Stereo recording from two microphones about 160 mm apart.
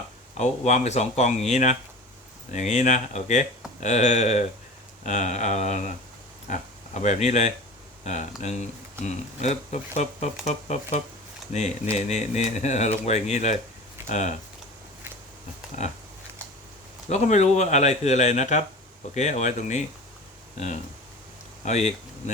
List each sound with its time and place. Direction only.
0.3 s speech: 45° left (ahead or behind)
17.1 s speech: 45° left (ahead or behind)
21.6 s speech: 45° left (ahead or behind)